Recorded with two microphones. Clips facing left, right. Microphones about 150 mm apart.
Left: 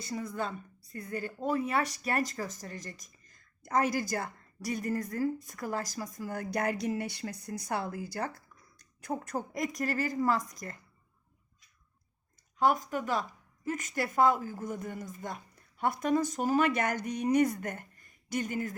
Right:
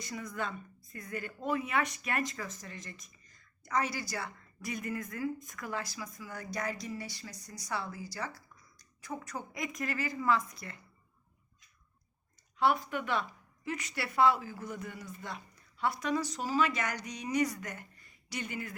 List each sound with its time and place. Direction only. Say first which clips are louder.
0.0 s a woman's voice: left 3 dB; 30° left (ahead or behind)
12.5 s a woman's voice: left 2 dB; 45° left (ahead or behind)